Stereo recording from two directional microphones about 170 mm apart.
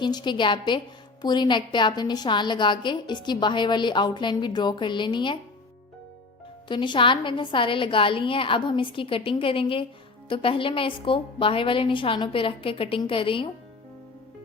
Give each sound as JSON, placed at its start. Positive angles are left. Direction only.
{"t": 0.0, "sound": "a woman's voice", "side_deg": 25}
{"t": 6.7, "sound": "a woman's voice", "side_deg": 30}